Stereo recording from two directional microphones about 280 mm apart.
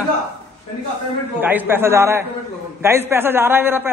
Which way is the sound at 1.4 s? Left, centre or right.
Centre.